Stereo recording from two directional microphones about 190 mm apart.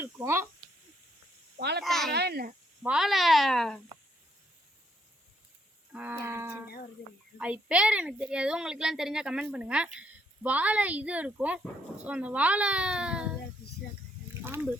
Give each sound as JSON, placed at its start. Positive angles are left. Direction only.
{"t": 0.0, "sound": "speech", "side_deg": -15}
{"t": 1.5, "sound": "speech", "side_deg": -60}
{"t": 1.8, "sound": "a woman's voice", "side_deg": 0}
{"t": 2.1, "sound": "speech", "side_deg": -55}
{"t": 2.8, "sound": "a woman's voice", "side_deg": -5}
{"t": 5.9, "sound": "a woman's voice", "side_deg": -10}
{"t": 14.4, "sound": "speech", "side_deg": -10}